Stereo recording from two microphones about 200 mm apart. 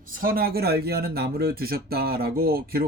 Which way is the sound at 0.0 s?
45° right (ahead or behind).